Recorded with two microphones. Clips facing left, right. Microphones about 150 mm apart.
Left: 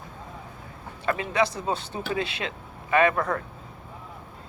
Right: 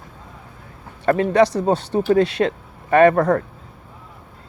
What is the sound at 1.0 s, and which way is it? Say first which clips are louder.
Speech: right 9 dB; 45° right (ahead or behind).